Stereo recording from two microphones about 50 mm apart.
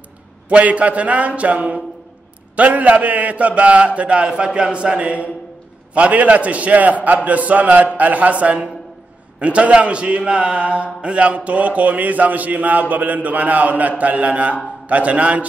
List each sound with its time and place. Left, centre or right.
0.5 s a man's voice: right
7.2 s a sound: right
8.0 s a man's voice: right